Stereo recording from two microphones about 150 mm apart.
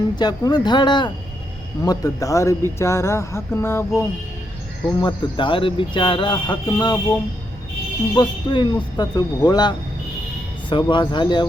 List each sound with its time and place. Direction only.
0.2 s speech: 25° left (ahead or behind)
2.7 s mantra: 20° left (ahead or behind)
4.9 s speech: 30° left (ahead or behind)
8.1 s speech: 30° left (ahead or behind)